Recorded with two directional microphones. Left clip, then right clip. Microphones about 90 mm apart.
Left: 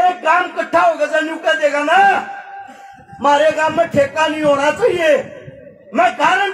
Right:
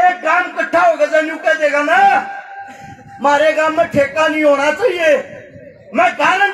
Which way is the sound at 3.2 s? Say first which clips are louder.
Right 1 dB; 20° left (ahead or behind).